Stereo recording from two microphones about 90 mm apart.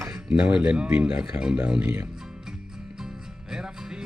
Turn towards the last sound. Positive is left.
turn(degrees=-5)  # may be behind; listen again after turning